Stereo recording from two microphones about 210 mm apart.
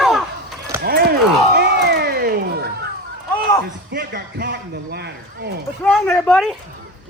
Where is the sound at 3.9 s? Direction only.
50° right (ahead or behind).